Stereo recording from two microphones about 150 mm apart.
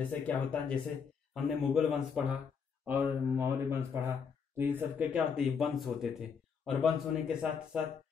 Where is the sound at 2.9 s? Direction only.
15° right (ahead or behind).